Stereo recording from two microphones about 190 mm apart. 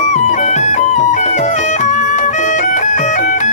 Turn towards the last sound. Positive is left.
turn(degrees=40)  # may be behind; listen again after turning